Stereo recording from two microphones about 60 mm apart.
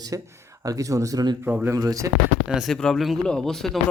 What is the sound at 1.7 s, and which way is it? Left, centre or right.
Speech, right.